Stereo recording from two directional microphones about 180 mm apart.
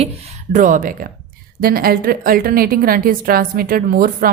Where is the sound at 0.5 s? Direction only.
45° right (ahead or behind).